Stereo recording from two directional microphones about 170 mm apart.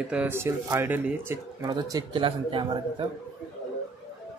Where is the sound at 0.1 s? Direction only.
10° right (ahead or behind); by 3.1 s 30° right (ahead or behind).